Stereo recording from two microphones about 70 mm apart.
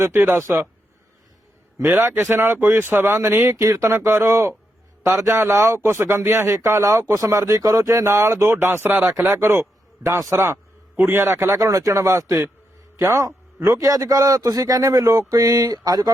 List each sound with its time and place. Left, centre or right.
0.0 s a man's voice: right
1.8 s a man's voice: right
3.6 s a man's voice: right
3.9 s a man's voice: right
10.9 s a man's voice: right